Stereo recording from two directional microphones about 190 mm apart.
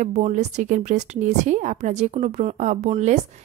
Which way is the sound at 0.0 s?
35° right (ahead or behind).